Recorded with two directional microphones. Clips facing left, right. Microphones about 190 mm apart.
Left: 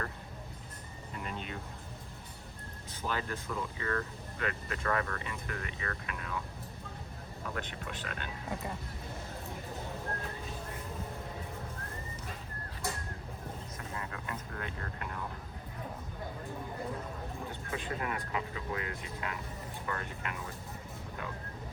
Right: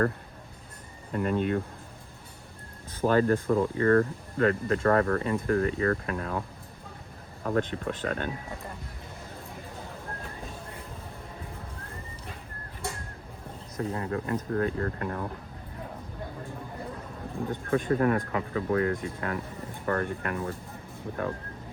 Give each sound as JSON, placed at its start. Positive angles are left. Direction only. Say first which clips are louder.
{"t": 1.1, "sound": "speech", "louder": "right 15 dB", "side_deg": -50}
{"t": 3.0, "sound": "speech", "louder": "right 14 dB", "side_deg": -50}
{"t": 7.4, "sound": "speech", "louder": "right 12 dB", "side_deg": -45}
{"t": 13.7, "sound": "speech", "louder": "right 17 dB", "side_deg": -35}
{"t": 17.5, "sound": "speech", "louder": "right 15 dB", "side_deg": -50}